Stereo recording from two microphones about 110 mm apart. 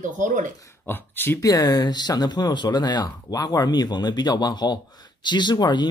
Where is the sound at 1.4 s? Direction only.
35° left (ahead or behind).